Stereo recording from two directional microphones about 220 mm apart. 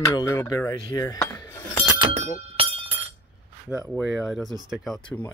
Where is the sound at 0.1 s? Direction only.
15° left (ahead or behind).